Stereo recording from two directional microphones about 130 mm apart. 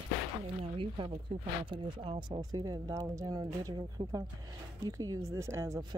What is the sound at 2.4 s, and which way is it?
Speech, 30° right (ahead or behind).